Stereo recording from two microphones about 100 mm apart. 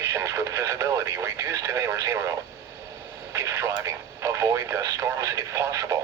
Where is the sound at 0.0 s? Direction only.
30° right (ahead or behind).